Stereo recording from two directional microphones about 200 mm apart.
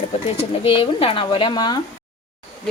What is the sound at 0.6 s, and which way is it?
Speech, 25° left (ahead or behind).